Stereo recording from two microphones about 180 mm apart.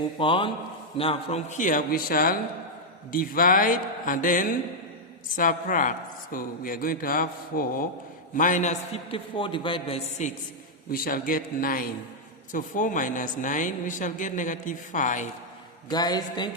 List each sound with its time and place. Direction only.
0.2 s a man's voice: 30° left (ahead or behind)
10.9 s speech: 50° left (ahead or behind)
15.9 s speech: 20° left (ahead or behind)